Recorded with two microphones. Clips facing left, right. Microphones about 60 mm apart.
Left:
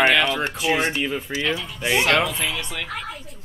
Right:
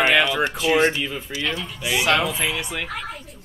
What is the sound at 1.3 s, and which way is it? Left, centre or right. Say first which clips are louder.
Speech: left 3 dB; centre.